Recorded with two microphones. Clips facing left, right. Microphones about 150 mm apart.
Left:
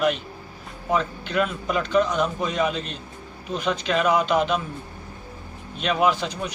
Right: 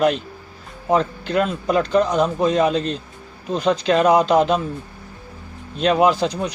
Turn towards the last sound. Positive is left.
turn(degrees=-35)  # may be behind; listen again after turning